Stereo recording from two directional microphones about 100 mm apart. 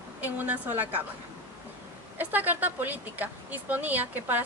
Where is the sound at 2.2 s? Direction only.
15° right (ahead or behind).